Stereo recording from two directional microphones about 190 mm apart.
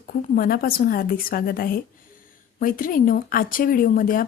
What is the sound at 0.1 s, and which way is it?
Speech, 50° left (ahead or behind).